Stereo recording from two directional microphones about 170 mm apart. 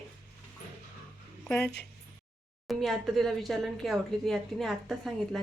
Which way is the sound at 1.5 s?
5° left (ahead or behind).